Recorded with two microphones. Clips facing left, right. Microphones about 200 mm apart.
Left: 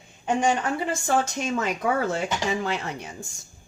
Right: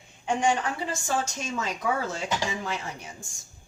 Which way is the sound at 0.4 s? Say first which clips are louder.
Left 1 dB; 55° left (ahead or behind).